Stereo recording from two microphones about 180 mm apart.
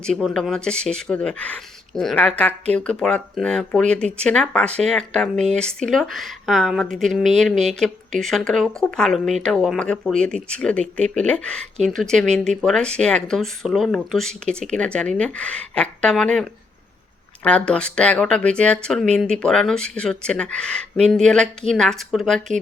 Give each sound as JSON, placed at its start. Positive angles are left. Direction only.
{"t": 0.0, "sound": "speech", "side_deg": 5}